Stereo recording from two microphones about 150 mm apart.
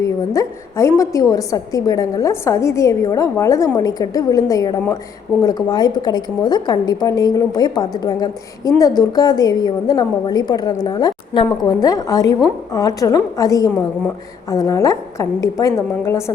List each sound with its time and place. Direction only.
0.0 s a woman's voice: 20° left (ahead or behind)